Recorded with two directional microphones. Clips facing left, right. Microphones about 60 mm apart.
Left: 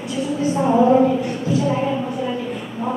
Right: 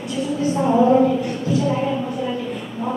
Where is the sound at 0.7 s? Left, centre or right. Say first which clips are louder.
Left 1 dB; left.